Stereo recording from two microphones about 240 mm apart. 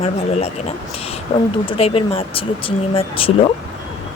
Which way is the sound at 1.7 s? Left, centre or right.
Left.